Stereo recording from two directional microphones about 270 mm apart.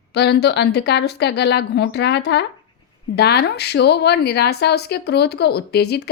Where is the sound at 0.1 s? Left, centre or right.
Left.